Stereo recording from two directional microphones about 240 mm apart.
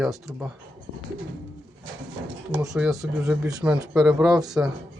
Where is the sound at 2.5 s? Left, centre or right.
Centre.